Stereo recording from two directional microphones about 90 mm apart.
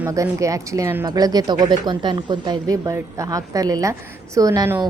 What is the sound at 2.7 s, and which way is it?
A woman's voice, 35° right (ahead or behind).